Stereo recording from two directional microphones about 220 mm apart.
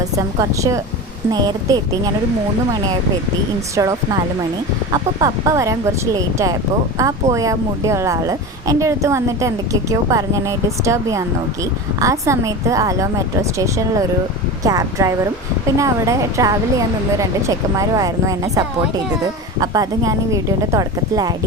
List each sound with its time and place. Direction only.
0.3 s speech: 15° right (ahead or behind)
3.8 s speech: 15° right (ahead or behind)